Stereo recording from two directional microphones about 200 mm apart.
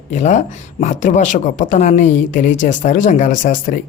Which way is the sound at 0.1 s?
35° left (ahead or behind).